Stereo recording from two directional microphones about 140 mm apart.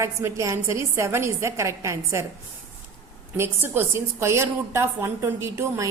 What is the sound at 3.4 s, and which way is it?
A woman's voice, 15° right (ahead or behind).